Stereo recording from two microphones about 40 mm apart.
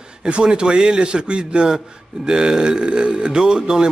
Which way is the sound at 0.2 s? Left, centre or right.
Right.